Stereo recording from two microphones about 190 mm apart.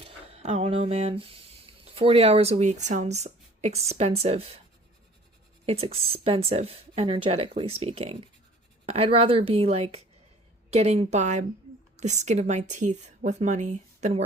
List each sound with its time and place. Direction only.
0.0 s speech: 35° right (ahead or behind)
5.6 s speech: 30° right (ahead or behind)